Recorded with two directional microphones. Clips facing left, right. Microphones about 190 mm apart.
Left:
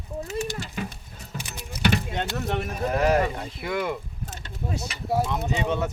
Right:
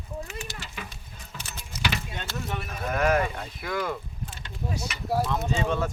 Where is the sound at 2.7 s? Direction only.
35° left (ahead or behind).